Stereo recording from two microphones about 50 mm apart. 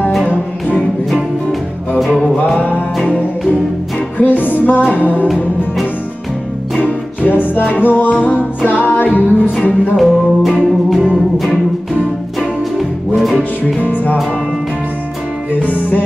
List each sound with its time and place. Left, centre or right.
2.3 s music: left
4.2 s music: left
6.8 s music: left
9.9 s music: centre
12.4 s music: centre
13.7 s music: left
15.5 s music: left